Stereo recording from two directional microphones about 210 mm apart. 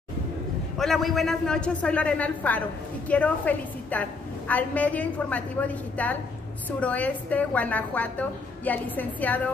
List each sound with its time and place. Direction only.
0.7 s a man's voice: centre (ahead or behind)